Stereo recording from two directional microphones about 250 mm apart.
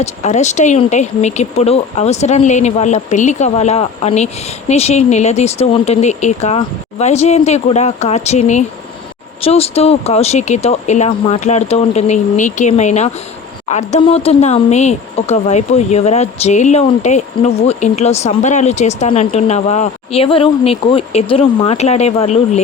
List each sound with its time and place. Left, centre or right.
0.0 s speech: left